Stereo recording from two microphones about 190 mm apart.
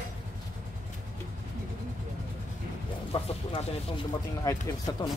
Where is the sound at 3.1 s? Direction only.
30° left (ahead or behind).